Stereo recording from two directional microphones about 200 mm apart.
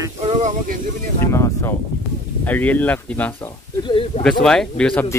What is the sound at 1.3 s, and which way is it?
Speech, 15° left (ahead or behind).